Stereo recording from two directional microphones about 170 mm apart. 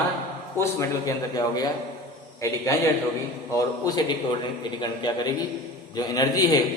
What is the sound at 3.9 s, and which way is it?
A man's voice, 20° left (ahead or behind).